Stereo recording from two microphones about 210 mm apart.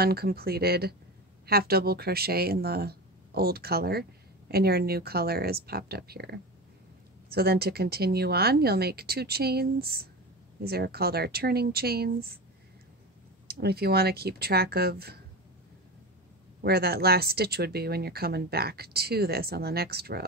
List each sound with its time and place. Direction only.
0.0 s speech: 50° right (ahead or behind)
13.5 s speech: 50° right (ahead or behind)
16.6 s speech: 50° right (ahead or behind)